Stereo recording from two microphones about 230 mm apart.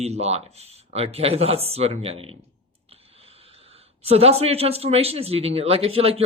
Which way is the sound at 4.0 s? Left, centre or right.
Right.